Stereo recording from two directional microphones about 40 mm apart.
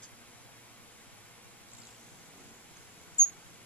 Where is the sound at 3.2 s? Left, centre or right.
Left.